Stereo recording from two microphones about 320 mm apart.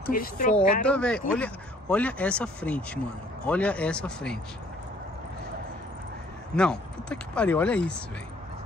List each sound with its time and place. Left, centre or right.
0.1 s speech: left
0.8 s speech: centre
6.5 s speech: centre